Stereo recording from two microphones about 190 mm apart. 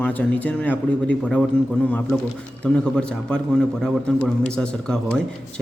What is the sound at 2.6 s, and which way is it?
A man's voice, 5° left (ahead or behind).